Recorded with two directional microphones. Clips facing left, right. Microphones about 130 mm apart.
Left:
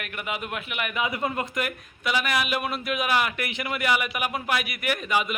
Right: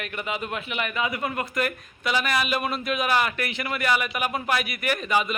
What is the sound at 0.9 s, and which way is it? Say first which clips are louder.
Speech: left 2 dB; 20° left (ahead or behind).